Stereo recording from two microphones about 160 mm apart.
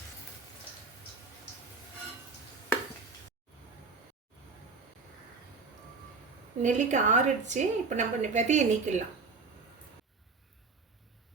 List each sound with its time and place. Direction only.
6.6 s a woman's voice: 50° right (ahead or behind)